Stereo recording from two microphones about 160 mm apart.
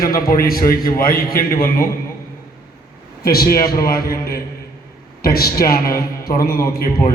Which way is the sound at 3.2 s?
70° left (ahead or behind).